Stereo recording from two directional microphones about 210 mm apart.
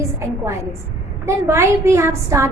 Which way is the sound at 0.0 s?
15° right (ahead or behind).